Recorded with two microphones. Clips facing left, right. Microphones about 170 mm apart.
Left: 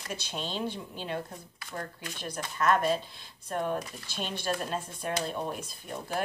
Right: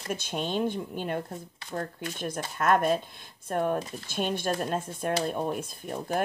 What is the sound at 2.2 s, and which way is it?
A woman's voice, 50° right (ahead or behind).